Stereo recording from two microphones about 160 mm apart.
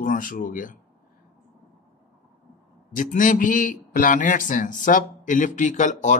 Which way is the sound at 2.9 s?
55° left (ahead or behind).